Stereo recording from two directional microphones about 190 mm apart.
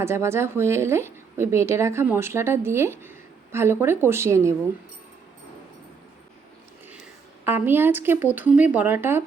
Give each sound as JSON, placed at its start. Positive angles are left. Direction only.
{"t": 0.0, "sound": "a woman's voice", "side_deg": -15}
{"t": 7.4, "sound": "a woman's voice", "side_deg": -10}